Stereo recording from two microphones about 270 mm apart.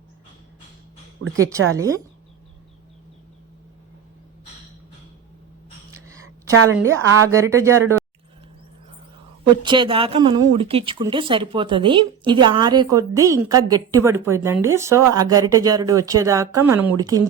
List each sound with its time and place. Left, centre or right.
1.4 s speech: centre
6.7 s speech: centre
9.4 s speech: centre